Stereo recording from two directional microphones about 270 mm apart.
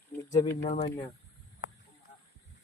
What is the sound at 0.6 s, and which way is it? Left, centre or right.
Speech, left.